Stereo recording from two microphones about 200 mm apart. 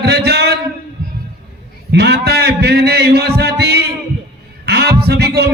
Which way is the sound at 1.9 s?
55° right (ahead or behind).